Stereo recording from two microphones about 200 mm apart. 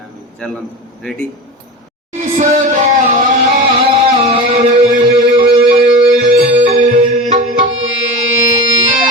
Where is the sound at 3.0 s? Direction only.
40° right (ahead or behind).